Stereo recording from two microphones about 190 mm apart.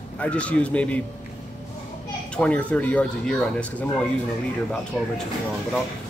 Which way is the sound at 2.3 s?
5° left (ahead or behind).